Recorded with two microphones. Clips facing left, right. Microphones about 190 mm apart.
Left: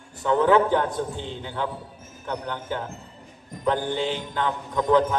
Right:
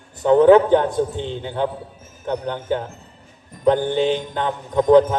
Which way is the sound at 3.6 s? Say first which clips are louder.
Right 7 dB; 20° right (ahead or behind).